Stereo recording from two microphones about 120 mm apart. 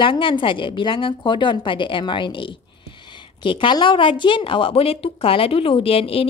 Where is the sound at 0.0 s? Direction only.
45° left (ahead or behind).